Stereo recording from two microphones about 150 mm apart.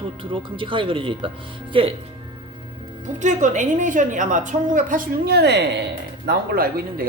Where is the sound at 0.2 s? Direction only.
35° right (ahead or behind).